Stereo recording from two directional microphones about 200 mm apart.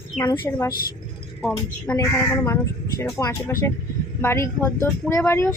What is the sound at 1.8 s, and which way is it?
Speech, 15° left (ahead or behind).